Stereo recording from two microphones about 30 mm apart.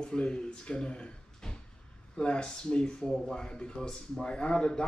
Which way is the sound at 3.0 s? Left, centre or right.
Centre.